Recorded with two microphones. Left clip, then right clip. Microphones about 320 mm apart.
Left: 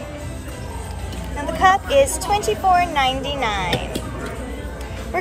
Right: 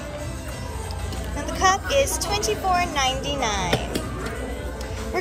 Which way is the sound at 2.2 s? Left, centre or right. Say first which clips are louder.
Left 5 dB; centre.